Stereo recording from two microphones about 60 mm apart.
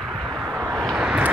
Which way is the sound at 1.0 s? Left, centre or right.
Centre.